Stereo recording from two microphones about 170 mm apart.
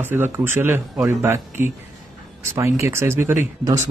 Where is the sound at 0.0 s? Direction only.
10° right (ahead or behind).